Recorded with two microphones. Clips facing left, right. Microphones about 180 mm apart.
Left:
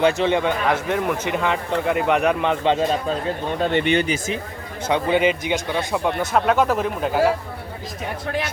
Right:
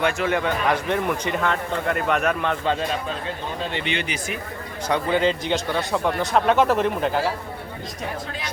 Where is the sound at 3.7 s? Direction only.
50° left (ahead or behind).